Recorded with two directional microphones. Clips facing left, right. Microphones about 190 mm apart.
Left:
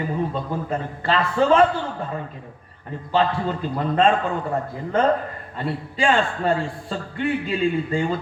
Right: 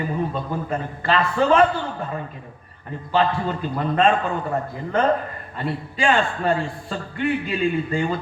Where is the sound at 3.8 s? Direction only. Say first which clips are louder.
Even; 30° left (ahead or behind).